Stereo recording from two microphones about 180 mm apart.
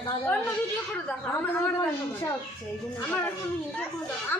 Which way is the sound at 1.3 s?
10° left (ahead or behind).